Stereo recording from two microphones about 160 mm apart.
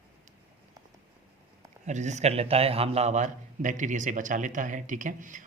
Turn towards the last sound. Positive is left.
turn(degrees=-55)  # may be behind; listen again after turning